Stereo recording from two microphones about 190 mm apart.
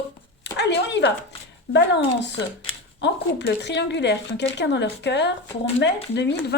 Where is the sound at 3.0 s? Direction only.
65° left (ahead or behind).